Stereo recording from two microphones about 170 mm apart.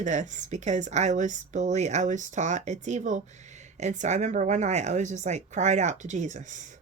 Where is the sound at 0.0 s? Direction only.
45° right (ahead or behind).